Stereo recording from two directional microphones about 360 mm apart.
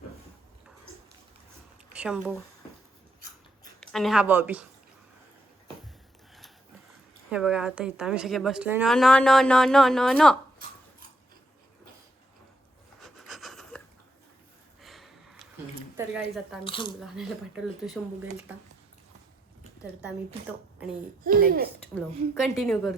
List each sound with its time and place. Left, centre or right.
1.9 s speech: centre
3.8 s speech: centre
7.3 s a woman's voice: centre
13.0 s pant: centre
14.8 s a sound: centre
16.6 s speech: centre
17.2 s a woman's voice: centre
19.8 s a woman's voice: centre
21.2 s speech: right
22.4 s a woman's voice: centre